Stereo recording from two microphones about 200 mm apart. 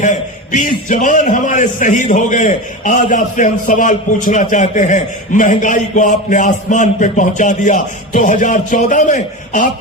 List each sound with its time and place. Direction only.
0.0 s a man's voice: 40° left (ahead or behind)